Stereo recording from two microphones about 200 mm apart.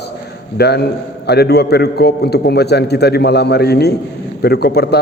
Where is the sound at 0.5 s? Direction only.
55° left (ahead or behind).